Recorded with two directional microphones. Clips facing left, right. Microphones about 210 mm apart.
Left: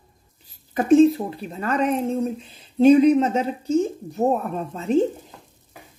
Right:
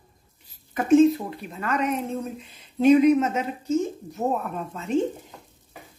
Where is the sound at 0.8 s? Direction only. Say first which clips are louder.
Left 2 dB; 35° left (ahead or behind).